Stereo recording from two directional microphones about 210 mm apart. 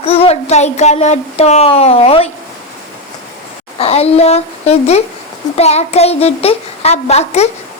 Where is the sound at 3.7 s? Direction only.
30° left (ahead or behind).